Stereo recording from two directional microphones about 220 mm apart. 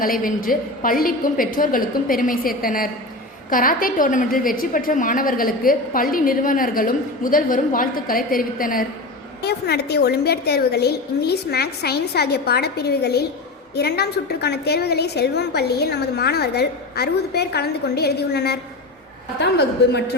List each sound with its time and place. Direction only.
0.0 s a woman's voice: 40° left (ahead or behind)